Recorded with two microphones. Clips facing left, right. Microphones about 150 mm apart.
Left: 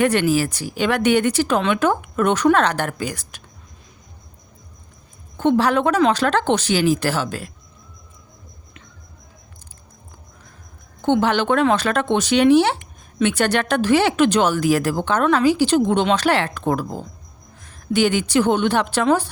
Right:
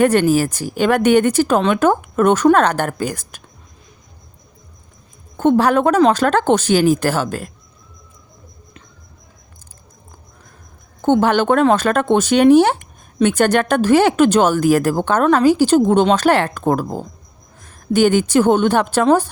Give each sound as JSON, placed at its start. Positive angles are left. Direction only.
{"t": 0.0, "sound": "speech", "side_deg": -45}
{"t": 5.4, "sound": "speech", "side_deg": -45}
{"t": 11.0, "sound": "a woman's voice", "side_deg": -45}